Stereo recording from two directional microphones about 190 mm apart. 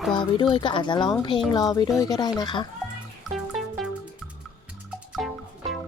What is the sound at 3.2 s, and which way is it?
Music, centre (ahead or behind).